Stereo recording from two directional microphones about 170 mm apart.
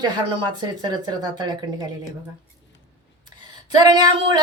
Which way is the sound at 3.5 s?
25° right (ahead or behind).